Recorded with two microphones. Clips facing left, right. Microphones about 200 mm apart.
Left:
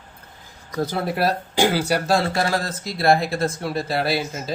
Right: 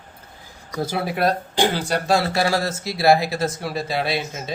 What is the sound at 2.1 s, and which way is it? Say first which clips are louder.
Speech: right 3 dB; 10° right (ahead or behind).